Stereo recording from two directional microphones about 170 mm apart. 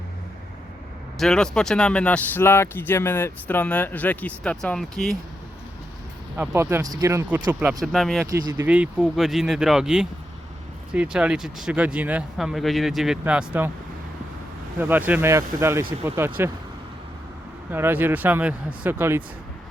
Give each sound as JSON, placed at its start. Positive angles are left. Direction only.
{"t": 1.2, "sound": "speech", "side_deg": 5}
{"t": 6.3, "sound": "speech", "side_deg": -10}
{"t": 7.6, "sound": "speech", "side_deg": 0}
{"t": 8.3, "sound": "speech", "side_deg": -20}
{"t": 8.6, "sound": "speech", "side_deg": -10}
{"t": 14.8, "sound": "speech", "side_deg": -10}
{"t": 17.7, "sound": "speech", "side_deg": -10}